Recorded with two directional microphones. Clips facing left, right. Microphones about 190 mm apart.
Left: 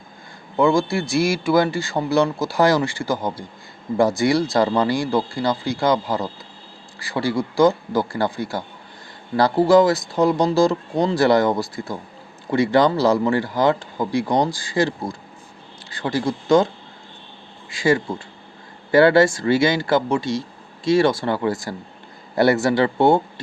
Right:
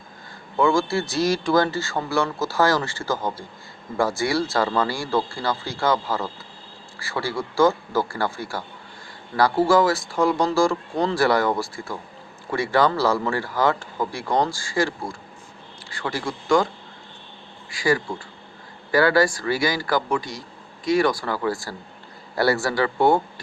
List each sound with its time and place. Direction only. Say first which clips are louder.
0.5 s speech: left 2 dB; 15° left (ahead or behind)
17.7 s speech: left 3 dB; 25° left (ahead or behind)